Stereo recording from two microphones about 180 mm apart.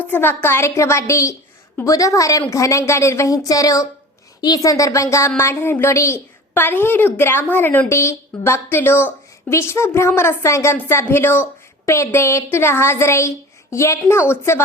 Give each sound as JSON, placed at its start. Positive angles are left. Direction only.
{"t": 0.0, "sound": "a woman's voice", "side_deg": 10}